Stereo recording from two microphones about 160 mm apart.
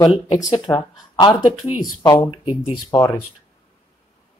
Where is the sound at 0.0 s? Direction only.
25° left (ahead or behind).